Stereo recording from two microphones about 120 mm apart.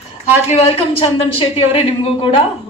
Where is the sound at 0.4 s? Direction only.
60° left (ahead or behind).